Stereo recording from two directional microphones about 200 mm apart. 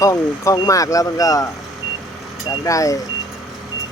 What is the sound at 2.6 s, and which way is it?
Speech, 15° left (ahead or behind).